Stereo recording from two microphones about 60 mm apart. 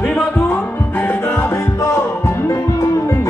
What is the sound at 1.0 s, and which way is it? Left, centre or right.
Music, left.